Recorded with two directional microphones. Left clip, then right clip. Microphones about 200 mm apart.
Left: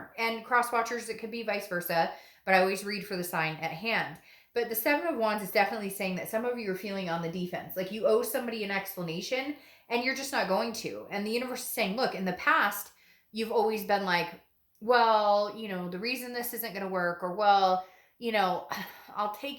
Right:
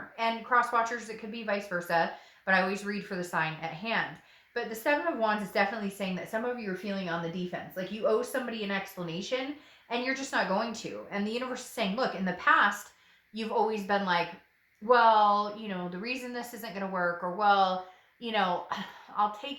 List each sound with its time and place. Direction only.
0.2 s a woman's voice: 35° left (ahead or behind)